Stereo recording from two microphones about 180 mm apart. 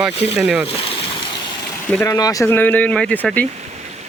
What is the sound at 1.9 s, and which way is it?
Speech, 15° left (ahead or behind).